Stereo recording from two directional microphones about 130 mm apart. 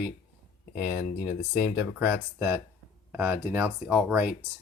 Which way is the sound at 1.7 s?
15° right (ahead or behind).